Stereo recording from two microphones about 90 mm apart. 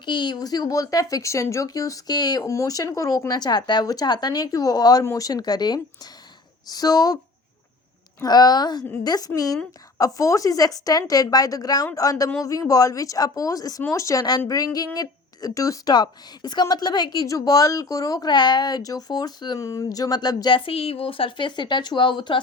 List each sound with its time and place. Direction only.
0.0 s a woman's voice: 55° left (ahead or behind)
8.2 s a woman's voice: 50° left (ahead or behind)
19.5 s speech: 40° left (ahead or behind); by 22.4 s 65° left (ahead or behind)